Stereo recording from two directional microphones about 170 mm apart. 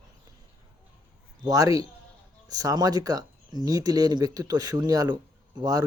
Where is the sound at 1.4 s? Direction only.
20° right (ahead or behind).